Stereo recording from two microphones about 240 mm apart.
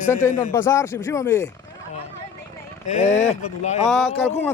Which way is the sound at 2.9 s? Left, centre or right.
Left.